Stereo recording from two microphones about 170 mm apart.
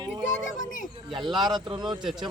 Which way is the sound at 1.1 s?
25° right (ahead or behind).